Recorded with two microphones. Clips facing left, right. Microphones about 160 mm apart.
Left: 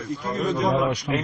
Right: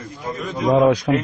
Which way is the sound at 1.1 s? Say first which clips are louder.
Right 6 dB; 65° right (ahead or behind).